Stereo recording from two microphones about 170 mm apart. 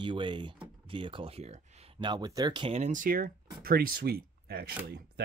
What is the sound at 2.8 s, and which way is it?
Speech, 50° right (ahead or behind).